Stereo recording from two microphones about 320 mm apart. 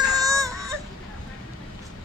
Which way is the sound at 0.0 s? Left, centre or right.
Centre.